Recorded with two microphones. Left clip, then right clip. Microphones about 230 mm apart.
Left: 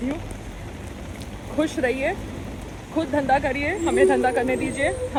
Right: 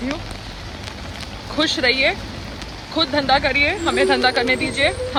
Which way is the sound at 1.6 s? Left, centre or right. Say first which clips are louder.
Right 6 dB; centre.